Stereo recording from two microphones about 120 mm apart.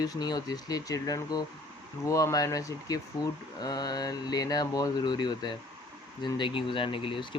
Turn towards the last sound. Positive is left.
turn(degrees=45)  # may be behind; listen again after turning